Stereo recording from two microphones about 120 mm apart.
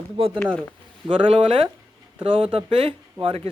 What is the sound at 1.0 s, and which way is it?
Speech, 45° right (ahead or behind).